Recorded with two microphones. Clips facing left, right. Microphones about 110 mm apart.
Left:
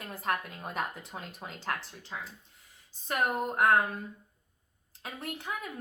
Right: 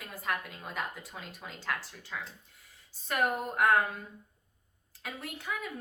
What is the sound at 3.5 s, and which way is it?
Speech, 25° left (ahead or behind).